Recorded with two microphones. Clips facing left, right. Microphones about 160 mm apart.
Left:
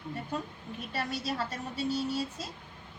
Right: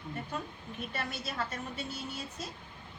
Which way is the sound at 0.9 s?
35° left (ahead or behind).